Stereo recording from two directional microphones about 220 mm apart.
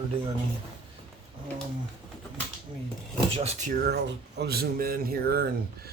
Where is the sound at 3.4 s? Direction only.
30° right (ahead or behind).